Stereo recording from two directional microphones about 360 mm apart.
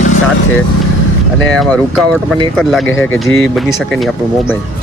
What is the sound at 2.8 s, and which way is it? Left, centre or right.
Speech, left.